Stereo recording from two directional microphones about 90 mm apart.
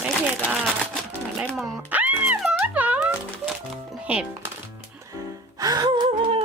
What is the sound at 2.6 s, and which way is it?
Music, 15° right (ahead or behind).